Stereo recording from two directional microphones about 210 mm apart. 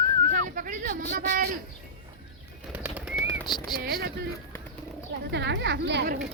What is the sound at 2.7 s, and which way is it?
Bird, 5° right (ahead or behind).